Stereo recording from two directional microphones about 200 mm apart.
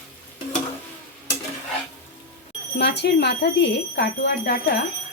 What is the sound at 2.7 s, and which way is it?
Speech, 60° left (ahead or behind).